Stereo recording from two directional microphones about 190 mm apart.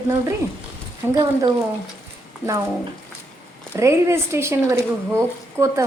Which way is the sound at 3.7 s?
15° right (ahead or behind).